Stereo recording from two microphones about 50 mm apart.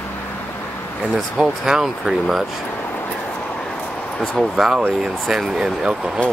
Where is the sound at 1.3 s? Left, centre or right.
Centre.